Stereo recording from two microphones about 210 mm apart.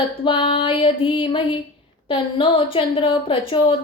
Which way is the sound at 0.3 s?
25° left (ahead or behind).